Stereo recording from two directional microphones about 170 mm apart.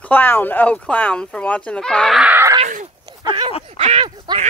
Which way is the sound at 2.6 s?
45° right (ahead or behind).